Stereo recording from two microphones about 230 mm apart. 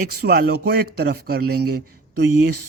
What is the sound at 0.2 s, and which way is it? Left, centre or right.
Speech, right.